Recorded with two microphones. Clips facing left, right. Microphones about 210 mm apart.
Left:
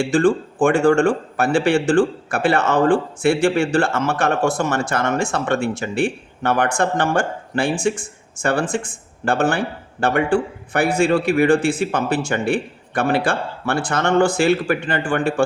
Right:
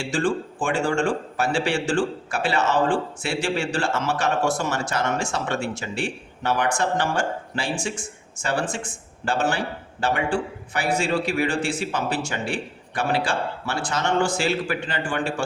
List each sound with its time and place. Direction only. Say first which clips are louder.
0.0 s a man's voice: left 7 dB; 55° left (ahead or behind)